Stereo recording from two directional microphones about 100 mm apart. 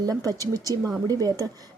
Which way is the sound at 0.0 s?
35° right (ahead or behind).